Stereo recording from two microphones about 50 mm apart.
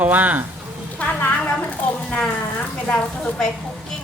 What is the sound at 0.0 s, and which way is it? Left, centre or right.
Speech, right.